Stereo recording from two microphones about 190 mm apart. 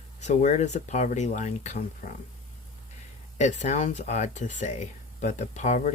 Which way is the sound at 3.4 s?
40° left (ahead or behind).